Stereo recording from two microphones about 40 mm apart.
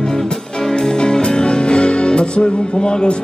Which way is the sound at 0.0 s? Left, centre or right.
Centre.